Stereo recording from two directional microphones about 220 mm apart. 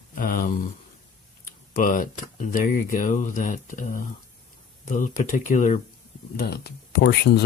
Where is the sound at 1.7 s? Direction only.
35° left (ahead or behind).